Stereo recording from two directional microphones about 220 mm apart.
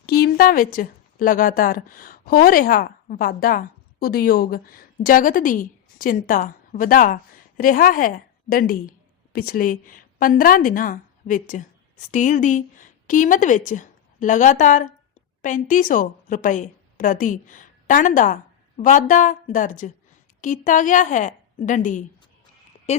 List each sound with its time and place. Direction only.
0.0 s a woman's voice: 45° left (ahead or behind)